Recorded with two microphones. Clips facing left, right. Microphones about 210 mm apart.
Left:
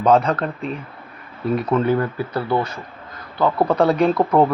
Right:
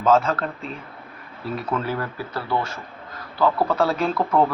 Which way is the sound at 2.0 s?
25° left (ahead or behind).